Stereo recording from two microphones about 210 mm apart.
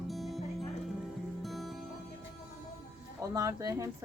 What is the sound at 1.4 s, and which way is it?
Music, centre (ahead or behind).